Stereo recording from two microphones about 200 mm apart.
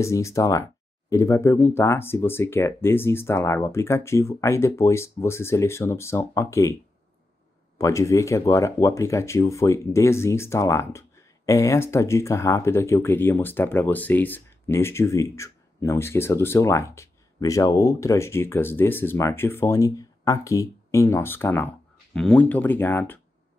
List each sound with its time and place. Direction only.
0.0 s speech: 15° left (ahead or behind)
7.7 s speech: 15° left (ahead or behind)